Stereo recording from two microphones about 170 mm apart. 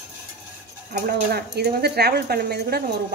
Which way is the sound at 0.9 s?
65° right (ahead or behind).